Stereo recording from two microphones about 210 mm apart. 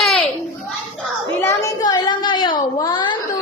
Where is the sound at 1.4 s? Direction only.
15° left (ahead or behind).